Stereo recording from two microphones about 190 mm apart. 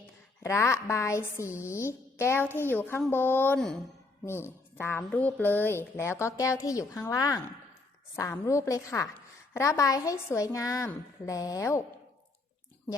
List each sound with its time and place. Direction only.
0.4 s a woman's voice: 15° left (ahead or behind)